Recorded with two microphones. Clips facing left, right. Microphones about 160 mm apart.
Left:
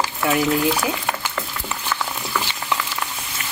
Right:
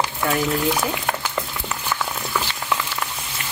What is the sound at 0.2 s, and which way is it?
Speech, 5° left (ahead or behind).